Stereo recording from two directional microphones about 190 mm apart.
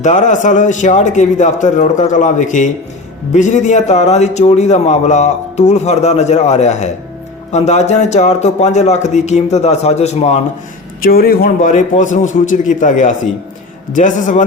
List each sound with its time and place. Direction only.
0.0 s a man's voice: 40° left (ahead or behind)
11.0 s a man's voice: 55° left (ahead or behind)